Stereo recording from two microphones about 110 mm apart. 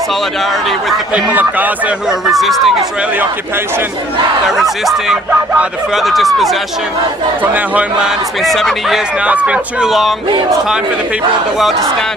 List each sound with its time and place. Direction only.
1.3 s a man's voice: 15° right (ahead or behind)
2.0 s speech: centre (ahead or behind)
4.9 s speech: 5° right (ahead or behind)
7.4 s a man's voice: 15° right (ahead or behind); by 9.0 s centre (ahead or behind)
9.2 s a man's voice: 10° right (ahead or behind)